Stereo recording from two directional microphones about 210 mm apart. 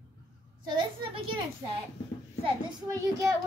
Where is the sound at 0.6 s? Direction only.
20° right (ahead or behind).